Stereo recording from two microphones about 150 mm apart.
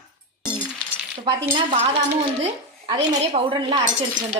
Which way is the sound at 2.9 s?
35° right (ahead or behind).